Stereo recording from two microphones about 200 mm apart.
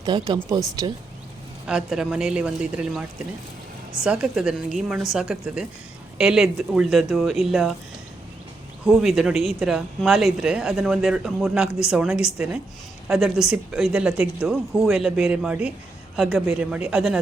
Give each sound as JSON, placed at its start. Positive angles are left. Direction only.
{"t": 0.0, "sound": "speech", "side_deg": -20}
{"t": 1.6, "sound": "speech", "side_deg": -5}
{"t": 4.0, "sound": "speech", "side_deg": -5}
{"t": 8.9, "sound": "speech", "side_deg": 0}